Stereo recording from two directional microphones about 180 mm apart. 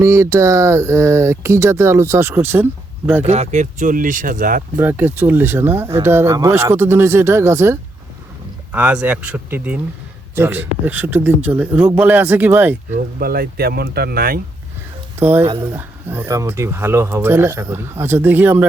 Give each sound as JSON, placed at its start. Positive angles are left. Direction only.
{"t": 0.0, "sound": "speech", "side_deg": -15}
{"t": 3.2, "sound": "speech", "side_deg": -40}
{"t": 4.8, "sound": "speech", "side_deg": -10}
{"t": 13.1, "sound": "speech", "side_deg": -55}
{"t": 15.2, "sound": "speech", "side_deg": -10}